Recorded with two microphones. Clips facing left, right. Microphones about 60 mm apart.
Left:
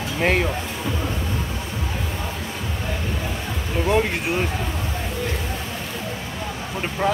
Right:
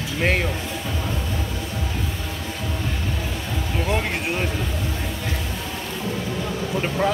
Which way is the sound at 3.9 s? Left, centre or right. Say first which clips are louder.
Left 5 dB; centre.